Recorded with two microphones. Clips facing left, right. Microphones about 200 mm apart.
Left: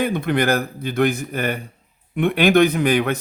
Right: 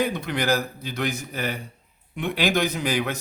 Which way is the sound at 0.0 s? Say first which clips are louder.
Left 5 dB; 55° left (ahead or behind).